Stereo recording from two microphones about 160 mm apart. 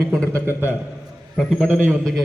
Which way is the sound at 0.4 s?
15° right (ahead or behind).